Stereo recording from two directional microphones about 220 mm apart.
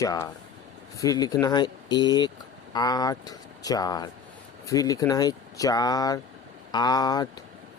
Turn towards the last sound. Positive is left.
turn(degrees=20)  # may be behind; listen again after turning